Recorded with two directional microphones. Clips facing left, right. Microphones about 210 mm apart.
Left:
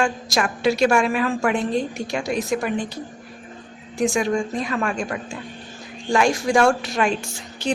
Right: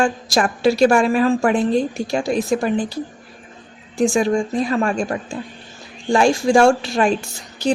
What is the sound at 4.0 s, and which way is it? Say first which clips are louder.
A woman's voice: right 4 dB; 30° right (ahead or behind).